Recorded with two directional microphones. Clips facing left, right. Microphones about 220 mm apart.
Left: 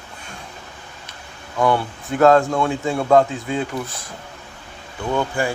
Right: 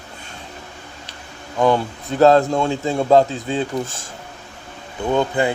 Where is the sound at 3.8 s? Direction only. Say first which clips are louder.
Even; 45° right (ahead or behind).